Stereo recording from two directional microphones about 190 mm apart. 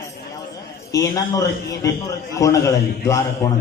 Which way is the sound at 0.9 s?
20° left (ahead or behind).